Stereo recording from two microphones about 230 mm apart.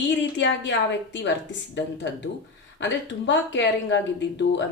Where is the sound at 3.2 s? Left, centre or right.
Left.